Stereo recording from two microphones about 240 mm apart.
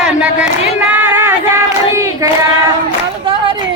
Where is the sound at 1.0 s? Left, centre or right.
Centre.